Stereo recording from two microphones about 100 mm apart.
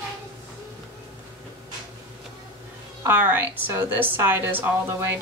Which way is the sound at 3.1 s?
20° right (ahead or behind).